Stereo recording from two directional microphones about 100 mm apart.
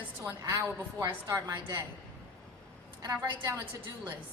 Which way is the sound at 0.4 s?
35° right (ahead or behind).